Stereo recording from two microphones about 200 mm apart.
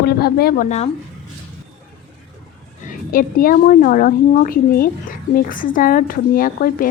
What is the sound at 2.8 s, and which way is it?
A woman's voice, 45° left (ahead or behind).